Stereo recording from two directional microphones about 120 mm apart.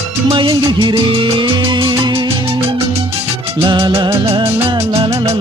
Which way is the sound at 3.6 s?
45° right (ahead or behind).